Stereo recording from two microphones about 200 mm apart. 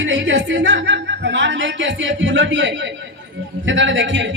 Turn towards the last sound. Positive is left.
turn(degrees=-70)  # may be behind; listen again after turning